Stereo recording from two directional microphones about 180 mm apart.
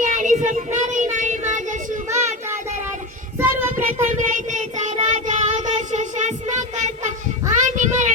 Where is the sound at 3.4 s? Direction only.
10° right (ahead or behind).